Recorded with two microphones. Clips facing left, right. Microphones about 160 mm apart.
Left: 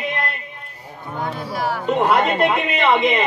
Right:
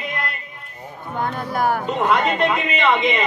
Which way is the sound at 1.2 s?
50° right (ahead or behind).